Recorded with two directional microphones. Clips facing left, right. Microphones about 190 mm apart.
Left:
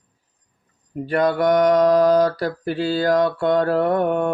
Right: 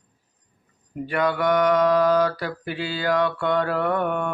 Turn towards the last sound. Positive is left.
turn(degrees=40)  # may be behind; listen again after turning